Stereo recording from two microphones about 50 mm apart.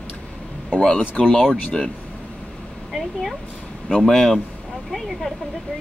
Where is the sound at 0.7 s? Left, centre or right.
Centre.